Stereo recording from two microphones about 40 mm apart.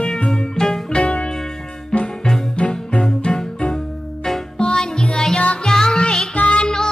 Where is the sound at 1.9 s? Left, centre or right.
Left.